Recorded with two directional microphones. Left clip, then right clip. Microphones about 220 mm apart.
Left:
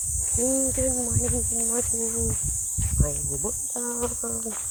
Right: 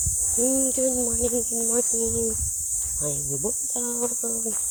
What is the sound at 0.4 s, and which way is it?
Speech, 15° right (ahead or behind).